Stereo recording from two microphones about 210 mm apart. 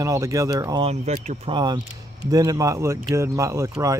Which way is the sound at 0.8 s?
30° right (ahead or behind).